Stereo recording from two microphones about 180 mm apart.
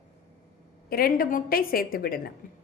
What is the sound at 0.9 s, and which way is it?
A woman's voice, 55° left (ahead or behind).